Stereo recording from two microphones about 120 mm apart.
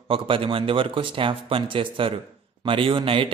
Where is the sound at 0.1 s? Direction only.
50° right (ahead or behind).